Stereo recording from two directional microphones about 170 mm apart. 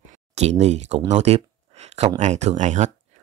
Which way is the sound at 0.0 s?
40° right (ahead or behind).